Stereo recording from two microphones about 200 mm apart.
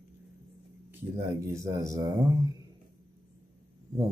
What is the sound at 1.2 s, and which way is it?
Speech, 15° right (ahead or behind).